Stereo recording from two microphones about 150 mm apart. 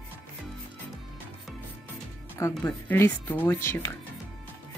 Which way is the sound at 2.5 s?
10° left (ahead or behind).